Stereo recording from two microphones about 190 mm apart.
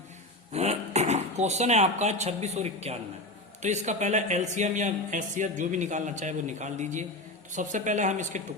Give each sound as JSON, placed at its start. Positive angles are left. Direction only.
{"t": 0.5, "sound": "speech", "side_deg": -35}